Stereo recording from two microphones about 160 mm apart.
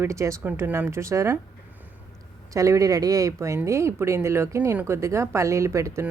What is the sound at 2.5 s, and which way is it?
Speech, 20° right (ahead or behind).